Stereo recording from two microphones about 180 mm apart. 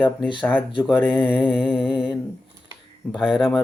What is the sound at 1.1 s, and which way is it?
Speech, 5° right (ahead or behind).